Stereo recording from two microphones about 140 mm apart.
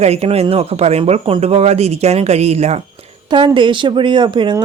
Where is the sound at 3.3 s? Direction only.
35° right (ahead or behind).